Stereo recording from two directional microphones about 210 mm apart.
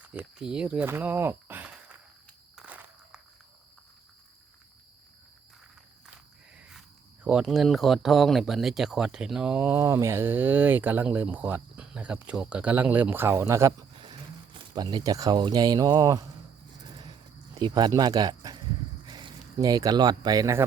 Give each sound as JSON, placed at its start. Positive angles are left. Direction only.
{"t": 0.0, "sound": "speech", "side_deg": -5}
{"t": 2.6, "sound": "walk", "side_deg": -5}
{"t": 6.6, "sound": "cricket", "side_deg": -5}
{"t": 7.3, "sound": "speech", "side_deg": -5}
{"t": 16.8, "sound": "a sound", "side_deg": -20}
{"t": 19.0, "sound": "speech", "side_deg": -20}